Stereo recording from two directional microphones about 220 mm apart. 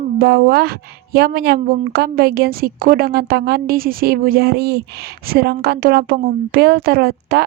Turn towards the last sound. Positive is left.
turn(degrees=-45)  # may be behind; listen again after turning